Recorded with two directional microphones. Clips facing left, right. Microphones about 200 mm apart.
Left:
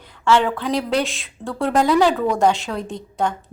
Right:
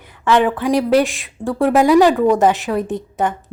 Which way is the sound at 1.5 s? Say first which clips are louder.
Right 5 dB; 15° right (ahead or behind).